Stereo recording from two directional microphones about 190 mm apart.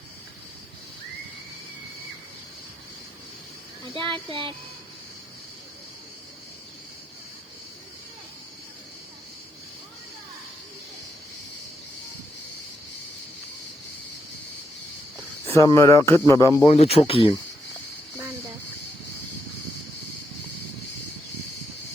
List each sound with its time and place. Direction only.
3.9 s speech: 25° right (ahead or behind)
15.4 s speech: 15° left (ahead or behind)
16.6 s speech: 30° left (ahead or behind)